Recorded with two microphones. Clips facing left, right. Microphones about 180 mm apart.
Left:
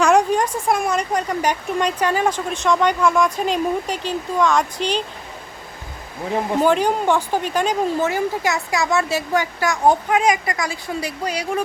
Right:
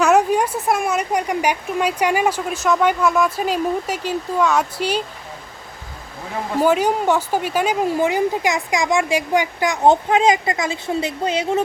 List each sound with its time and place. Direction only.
0.0 s speech: 5° right (ahead or behind)
6.6 s speech: 10° right (ahead or behind); by 11.6 s 25° right (ahead or behind)